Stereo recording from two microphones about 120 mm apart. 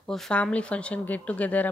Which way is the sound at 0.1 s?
10° left (ahead or behind).